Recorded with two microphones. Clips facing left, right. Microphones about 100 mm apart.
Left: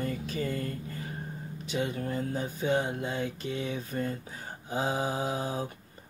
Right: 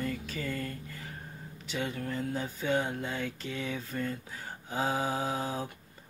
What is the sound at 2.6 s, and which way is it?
Speech, 20° left (ahead or behind).